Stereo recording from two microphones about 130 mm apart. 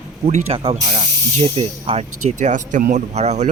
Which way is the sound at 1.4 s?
45° right (ahead or behind).